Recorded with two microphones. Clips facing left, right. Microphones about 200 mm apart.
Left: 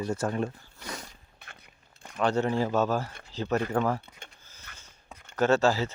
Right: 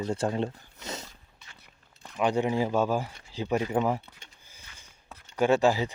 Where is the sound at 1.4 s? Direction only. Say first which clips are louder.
Left 5 dB; 55° left (ahead or behind).